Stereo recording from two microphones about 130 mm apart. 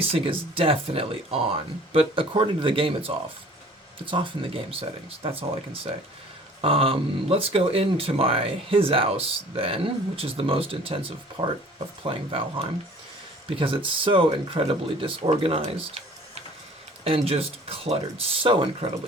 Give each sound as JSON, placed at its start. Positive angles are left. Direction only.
{"t": 0.0, "sound": "speech", "side_deg": -45}